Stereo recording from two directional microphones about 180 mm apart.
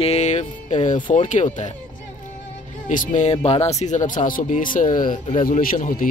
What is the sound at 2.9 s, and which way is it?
A man's voice, 45° left (ahead or behind).